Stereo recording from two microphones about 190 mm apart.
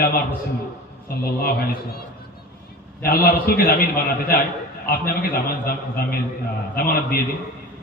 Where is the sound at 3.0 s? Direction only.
50° left (ahead or behind).